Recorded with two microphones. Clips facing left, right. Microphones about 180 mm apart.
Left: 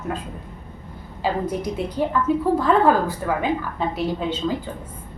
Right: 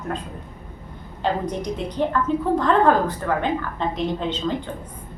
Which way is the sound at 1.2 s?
5° left (ahead or behind).